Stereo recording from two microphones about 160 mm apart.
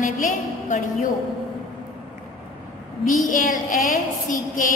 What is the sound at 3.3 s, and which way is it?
A woman's voice, 55° left (ahead or behind).